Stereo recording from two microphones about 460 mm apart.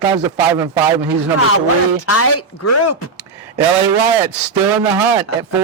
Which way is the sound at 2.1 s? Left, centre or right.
Left.